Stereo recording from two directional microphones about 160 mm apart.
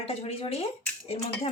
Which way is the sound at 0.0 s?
40° left (ahead or behind).